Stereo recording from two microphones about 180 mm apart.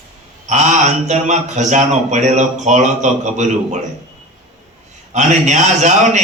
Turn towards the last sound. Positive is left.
turn(degrees=-40)  # may be behind; listen again after turning